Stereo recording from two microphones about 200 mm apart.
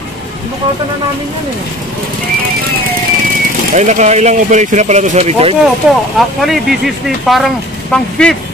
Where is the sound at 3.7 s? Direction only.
35° right (ahead or behind).